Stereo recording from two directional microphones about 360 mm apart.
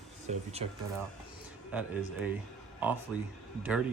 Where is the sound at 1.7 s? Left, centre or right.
Centre.